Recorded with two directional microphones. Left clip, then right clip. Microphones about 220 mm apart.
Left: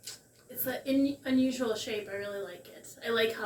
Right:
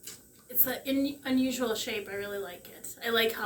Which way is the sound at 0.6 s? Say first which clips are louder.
Left 1 dB; 15° right (ahead or behind).